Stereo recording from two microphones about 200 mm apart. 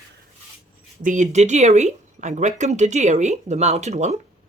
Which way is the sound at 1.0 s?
40° right (ahead or behind).